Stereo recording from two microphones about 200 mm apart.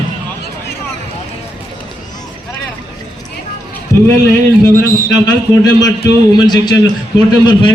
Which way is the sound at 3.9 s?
15° left (ahead or behind).